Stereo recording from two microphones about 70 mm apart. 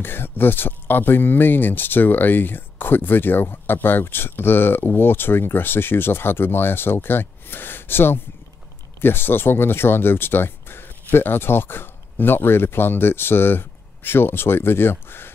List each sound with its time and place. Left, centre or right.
0.0 s speech: left